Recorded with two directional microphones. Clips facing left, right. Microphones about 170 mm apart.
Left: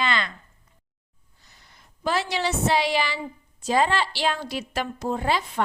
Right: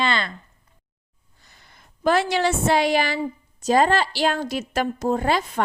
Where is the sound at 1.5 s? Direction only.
55° right (ahead or behind).